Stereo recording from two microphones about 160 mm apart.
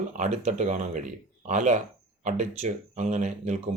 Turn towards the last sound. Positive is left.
turn(degrees=-45)  # may be behind; listen again after turning